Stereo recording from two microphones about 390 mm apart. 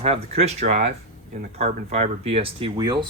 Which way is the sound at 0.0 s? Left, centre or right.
Centre.